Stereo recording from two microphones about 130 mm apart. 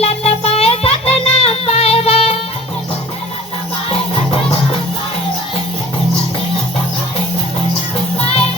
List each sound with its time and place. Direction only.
0.0 s music: 50° left (ahead or behind)